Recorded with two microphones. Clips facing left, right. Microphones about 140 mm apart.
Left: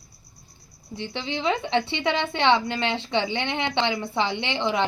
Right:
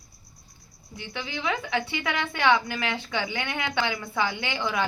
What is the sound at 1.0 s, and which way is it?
A woman's voice, 30° left (ahead or behind).